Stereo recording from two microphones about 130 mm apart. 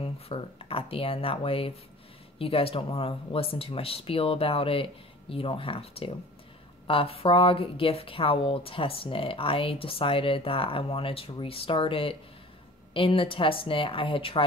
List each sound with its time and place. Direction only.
0.0 s a woman's voice: 45° left (ahead or behind)